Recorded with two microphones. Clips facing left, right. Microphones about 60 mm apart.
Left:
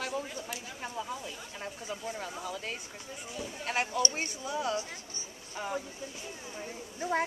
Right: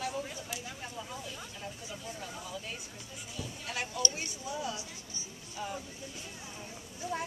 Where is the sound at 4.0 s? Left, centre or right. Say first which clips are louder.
Left 4 dB; left.